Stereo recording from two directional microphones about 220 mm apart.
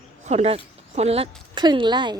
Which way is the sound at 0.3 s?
30° right (ahead or behind).